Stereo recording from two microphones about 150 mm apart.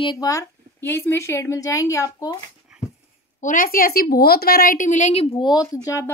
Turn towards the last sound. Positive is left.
turn(degrees=20)  # may be behind; listen again after turning